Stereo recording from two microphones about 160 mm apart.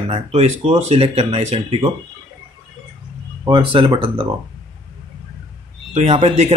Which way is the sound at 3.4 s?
30° right (ahead or behind).